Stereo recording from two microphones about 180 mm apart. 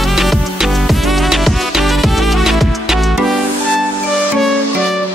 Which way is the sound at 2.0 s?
Centre (ahead or behind).